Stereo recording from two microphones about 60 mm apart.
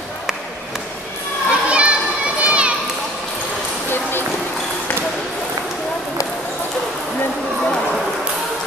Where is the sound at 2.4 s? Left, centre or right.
Centre.